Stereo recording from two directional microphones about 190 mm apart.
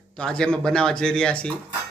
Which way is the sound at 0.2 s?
5° left (ahead or behind).